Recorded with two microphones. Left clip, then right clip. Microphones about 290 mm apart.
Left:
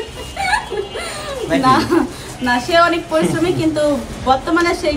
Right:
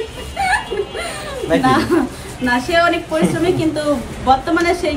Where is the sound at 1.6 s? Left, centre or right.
Centre.